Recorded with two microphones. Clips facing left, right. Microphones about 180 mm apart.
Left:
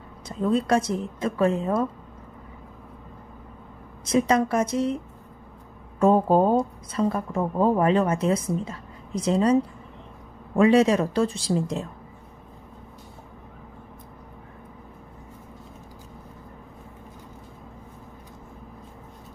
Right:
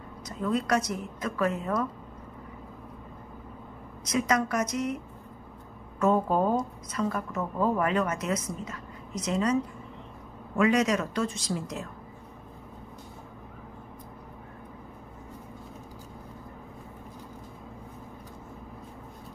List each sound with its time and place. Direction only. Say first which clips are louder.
0.3 s speech: left 5 dB; 30° left (ahead or behind)
4.0 s speech: left 6 dB; 30° left (ahead or behind)
5.9 s speech: left 6 dB; 30° left (ahead or behind)